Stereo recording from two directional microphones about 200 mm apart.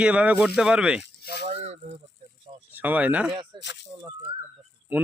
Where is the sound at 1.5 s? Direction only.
35° right (ahead or behind).